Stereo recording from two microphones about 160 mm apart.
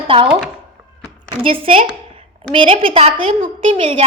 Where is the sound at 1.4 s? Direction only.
35° right (ahead or behind).